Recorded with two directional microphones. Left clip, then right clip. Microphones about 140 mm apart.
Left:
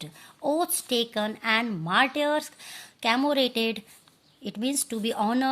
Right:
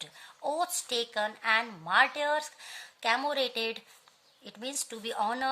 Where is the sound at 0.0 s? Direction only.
30° left (ahead or behind).